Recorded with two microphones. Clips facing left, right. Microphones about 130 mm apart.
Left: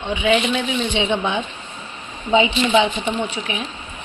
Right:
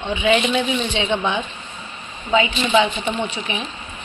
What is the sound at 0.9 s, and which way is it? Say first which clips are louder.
Speech: left 1 dB; 15° left (ahead or behind).